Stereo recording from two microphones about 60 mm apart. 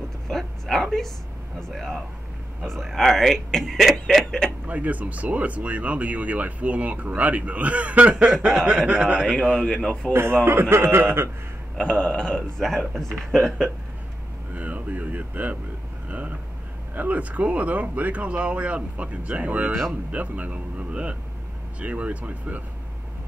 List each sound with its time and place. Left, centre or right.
0.3 s a sound: centre
1.7 s speech: centre
4.6 s speech: right
10.1 s a man's voice: right
11.7 s speech: centre
14.5 s a sound: right
16.9 s speech: right
19.7 s speech: centre
20.1 s speech: right